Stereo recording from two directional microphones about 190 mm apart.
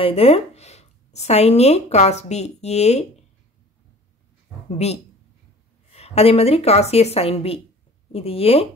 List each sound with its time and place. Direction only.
0.0 s speech: 30° left (ahead or behind)
4.6 s speech: 35° left (ahead or behind)